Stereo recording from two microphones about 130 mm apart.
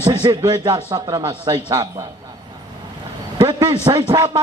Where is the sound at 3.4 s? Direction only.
35° right (ahead or behind).